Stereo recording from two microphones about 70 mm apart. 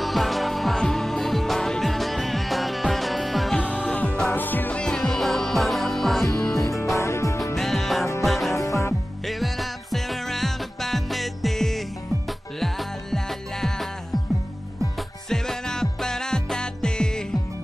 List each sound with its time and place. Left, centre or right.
0.0 s music: centre
3.5 s music: centre
6.5 s music: left
7.5 s music: centre
8.5 s music: left
9.2 s music: centre
15.0 s music: centre